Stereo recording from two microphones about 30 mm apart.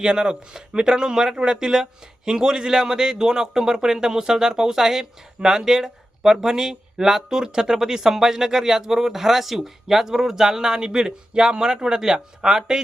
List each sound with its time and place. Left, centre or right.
0.0 s speech: right